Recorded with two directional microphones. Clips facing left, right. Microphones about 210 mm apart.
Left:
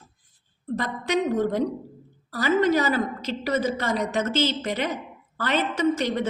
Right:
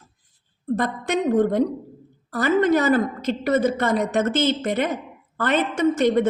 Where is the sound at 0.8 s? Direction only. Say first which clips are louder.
Right 1 dB; 50° right (ahead or behind).